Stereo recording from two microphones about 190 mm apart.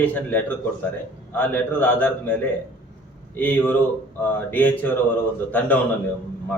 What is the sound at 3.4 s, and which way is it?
A man's voice, 10° left (ahead or behind).